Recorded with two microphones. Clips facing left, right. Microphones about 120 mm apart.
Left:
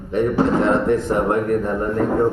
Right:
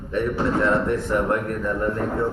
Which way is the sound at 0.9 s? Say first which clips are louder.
Left 6 dB; 90° left.